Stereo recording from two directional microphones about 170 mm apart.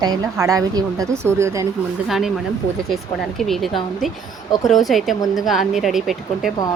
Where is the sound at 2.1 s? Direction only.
Centre (ahead or behind).